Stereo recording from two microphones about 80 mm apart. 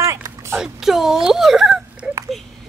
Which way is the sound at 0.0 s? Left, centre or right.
Right.